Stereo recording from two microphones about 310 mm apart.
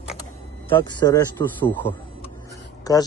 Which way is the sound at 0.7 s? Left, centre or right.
Centre.